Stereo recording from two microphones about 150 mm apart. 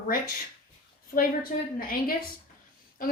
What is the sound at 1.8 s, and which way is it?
Speech, 80° left.